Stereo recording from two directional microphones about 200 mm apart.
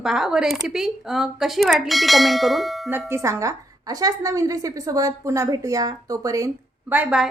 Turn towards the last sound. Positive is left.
turn(degrees=-5)  # may be behind; listen again after turning